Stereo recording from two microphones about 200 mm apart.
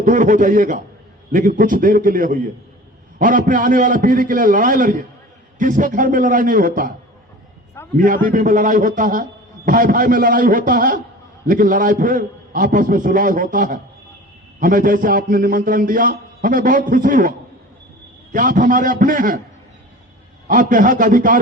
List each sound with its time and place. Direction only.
0.0 s a man's voice: 40° right (ahead or behind)
7.9 s a man's voice: 40° right (ahead or behind)
20.5 s a man's voice: 40° right (ahead or behind)